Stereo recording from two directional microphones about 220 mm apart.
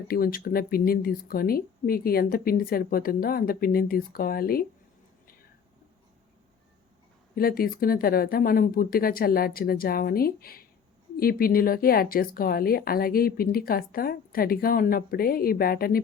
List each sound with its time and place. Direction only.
0.1 s speech: 40° left (ahead or behind)
7.3 s speech: 40° left (ahead or behind)